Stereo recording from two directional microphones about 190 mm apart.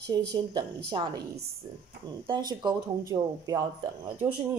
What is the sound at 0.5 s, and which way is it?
Speech, 20° right (ahead or behind).